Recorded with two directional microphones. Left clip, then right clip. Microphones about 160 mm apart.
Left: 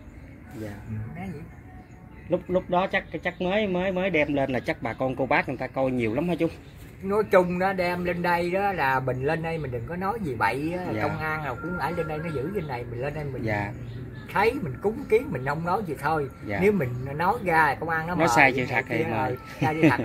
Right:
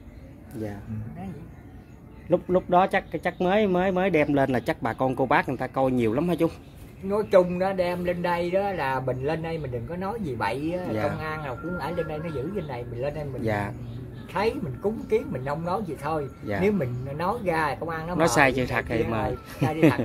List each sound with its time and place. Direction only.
2.2 s speech: 40° right (ahead or behind)
7.1 s a man's voice: 5° left (ahead or behind)
13.4 s speech: 25° right (ahead or behind)
14.3 s a man's voice: 5° left (ahead or behind)
18.1 s speech: 25° right (ahead or behind)